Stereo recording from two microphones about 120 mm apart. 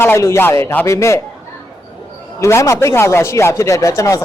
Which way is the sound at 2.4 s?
25° left (ahead or behind).